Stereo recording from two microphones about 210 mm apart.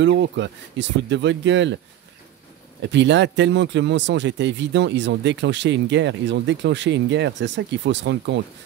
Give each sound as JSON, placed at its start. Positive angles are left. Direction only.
{"t": 0.0, "sound": "speech", "side_deg": -60}
{"t": 2.8, "sound": "speech", "side_deg": -60}